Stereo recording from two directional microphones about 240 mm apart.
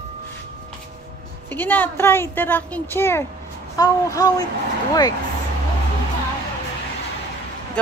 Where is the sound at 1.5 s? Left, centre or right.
Centre.